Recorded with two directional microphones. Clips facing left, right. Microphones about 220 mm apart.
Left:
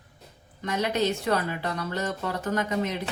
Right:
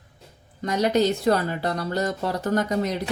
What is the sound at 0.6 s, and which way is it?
A woman's voice, 35° right (ahead or behind).